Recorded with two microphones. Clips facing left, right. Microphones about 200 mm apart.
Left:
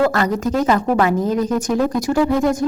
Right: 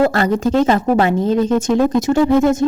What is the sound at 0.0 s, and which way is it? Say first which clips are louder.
Speech: right 3 dB; 30° right (ahead or behind).